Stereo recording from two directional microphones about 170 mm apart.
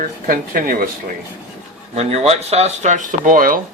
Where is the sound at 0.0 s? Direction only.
55° right (ahead or behind).